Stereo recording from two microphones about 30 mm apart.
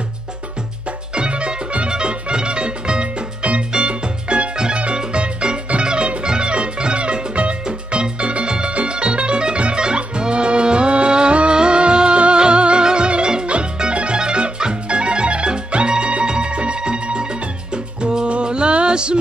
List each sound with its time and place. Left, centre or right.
1.1 s music: right
7.6 s music: right
8.2 s music: right